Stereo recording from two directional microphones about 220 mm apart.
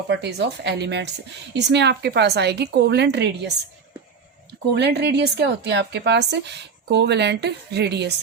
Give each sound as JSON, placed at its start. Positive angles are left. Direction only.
{"t": 0.1, "sound": "speech", "side_deg": -50}
{"t": 4.6, "sound": "speech", "side_deg": -50}